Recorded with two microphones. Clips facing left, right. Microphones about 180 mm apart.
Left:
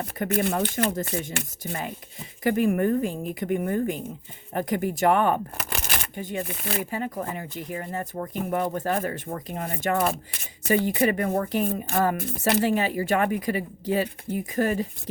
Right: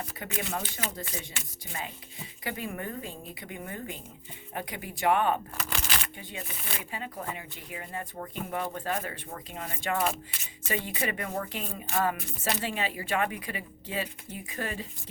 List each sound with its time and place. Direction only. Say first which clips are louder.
0.0 s speech: left 11 dB; 50° left (ahead or behind)